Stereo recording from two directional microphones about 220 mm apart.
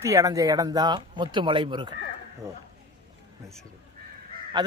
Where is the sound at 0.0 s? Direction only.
15° right (ahead or behind).